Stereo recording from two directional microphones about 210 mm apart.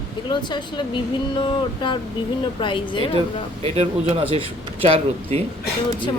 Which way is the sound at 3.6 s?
30° right (ahead or behind).